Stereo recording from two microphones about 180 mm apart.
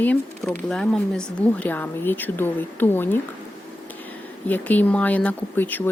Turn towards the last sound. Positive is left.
turn(degrees=10)  # may be behind; listen again after turning